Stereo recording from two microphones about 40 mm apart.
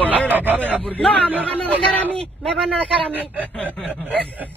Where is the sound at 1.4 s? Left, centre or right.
Left.